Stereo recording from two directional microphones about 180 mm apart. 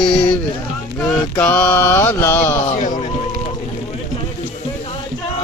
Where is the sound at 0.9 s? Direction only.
5° left (ahead or behind).